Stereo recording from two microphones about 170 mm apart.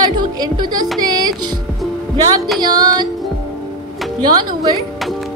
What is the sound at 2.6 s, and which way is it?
Speech, 25° right (ahead or behind).